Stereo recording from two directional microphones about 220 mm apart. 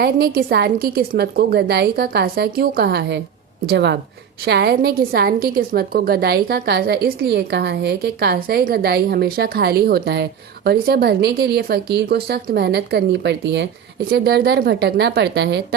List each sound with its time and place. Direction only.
0.0 s a woman's voice: 45° right (ahead or behind)